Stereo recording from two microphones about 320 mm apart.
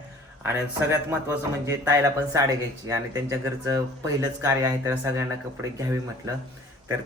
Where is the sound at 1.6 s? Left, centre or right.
Centre.